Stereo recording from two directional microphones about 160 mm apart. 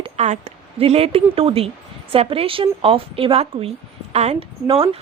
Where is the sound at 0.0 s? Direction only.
40° right (ahead or behind).